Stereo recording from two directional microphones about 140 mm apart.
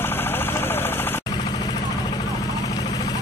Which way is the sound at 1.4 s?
30° left (ahead or behind).